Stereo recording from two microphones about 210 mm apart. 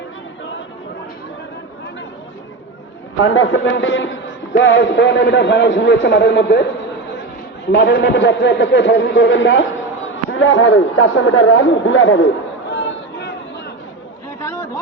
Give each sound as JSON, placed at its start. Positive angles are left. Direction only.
{"t": 3.2, "sound": "a man's voice", "side_deg": 70}
{"t": 7.7, "sound": "a man's voice", "side_deg": 55}
{"t": 12.7, "sound": "chatter", "side_deg": 60}
{"t": 14.4, "sound": "a sound", "side_deg": 15}